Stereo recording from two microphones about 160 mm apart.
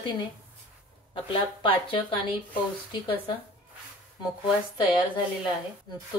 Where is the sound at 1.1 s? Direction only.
35° left (ahead or behind).